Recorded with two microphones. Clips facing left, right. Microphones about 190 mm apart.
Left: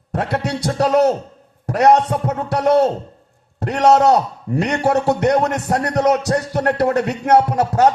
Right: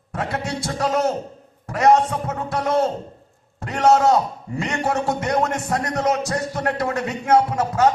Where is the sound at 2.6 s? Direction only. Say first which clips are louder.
Left 7 dB; 35° left (ahead or behind).